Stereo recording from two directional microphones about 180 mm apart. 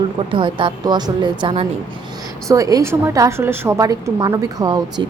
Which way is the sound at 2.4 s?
20° right (ahead or behind).